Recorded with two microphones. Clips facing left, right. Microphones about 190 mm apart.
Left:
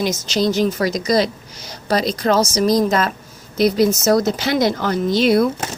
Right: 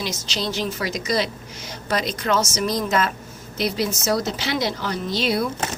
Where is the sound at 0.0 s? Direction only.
45° left (ahead or behind).